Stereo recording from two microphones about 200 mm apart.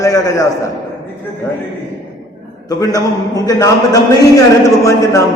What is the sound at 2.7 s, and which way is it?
A man's voice, 20° left (ahead or behind).